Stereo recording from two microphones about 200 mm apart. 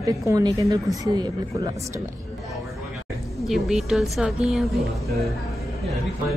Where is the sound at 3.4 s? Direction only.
Centre (ahead or behind).